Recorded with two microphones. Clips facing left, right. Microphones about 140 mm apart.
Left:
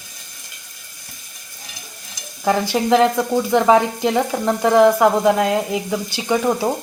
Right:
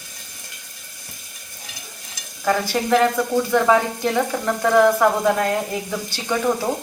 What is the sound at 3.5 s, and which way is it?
Sizzle, 20° left (ahead or behind).